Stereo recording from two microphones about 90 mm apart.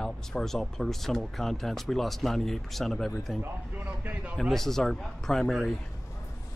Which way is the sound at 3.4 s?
20° right (ahead or behind).